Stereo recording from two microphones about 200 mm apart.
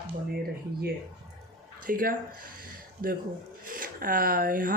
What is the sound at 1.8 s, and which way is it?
Speech, 45° right (ahead or behind).